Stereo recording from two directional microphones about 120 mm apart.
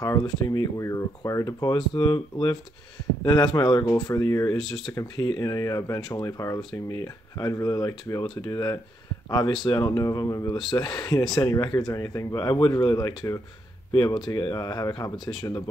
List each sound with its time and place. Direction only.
0.0 s speech: 30° left (ahead or behind)